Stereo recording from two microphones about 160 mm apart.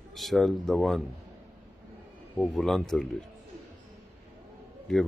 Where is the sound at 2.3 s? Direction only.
Centre (ahead or behind).